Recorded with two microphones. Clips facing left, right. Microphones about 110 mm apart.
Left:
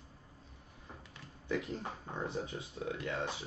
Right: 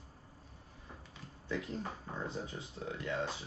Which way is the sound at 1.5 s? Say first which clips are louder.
Left 2 dB; 20° left (ahead or behind).